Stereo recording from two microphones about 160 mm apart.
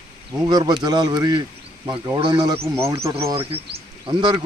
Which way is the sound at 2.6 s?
15° right (ahead or behind).